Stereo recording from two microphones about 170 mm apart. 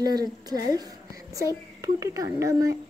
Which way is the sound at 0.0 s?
25° right (ahead or behind).